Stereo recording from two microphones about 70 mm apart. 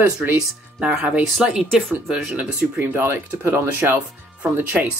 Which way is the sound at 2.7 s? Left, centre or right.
Right.